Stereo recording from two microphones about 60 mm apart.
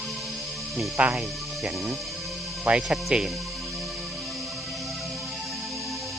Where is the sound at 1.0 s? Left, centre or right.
Right.